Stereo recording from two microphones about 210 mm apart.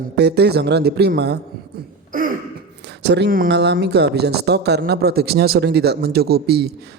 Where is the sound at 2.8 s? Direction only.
55° right (ahead or behind).